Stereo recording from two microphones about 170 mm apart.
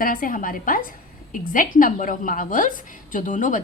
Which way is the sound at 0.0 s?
55° left (ahead or behind).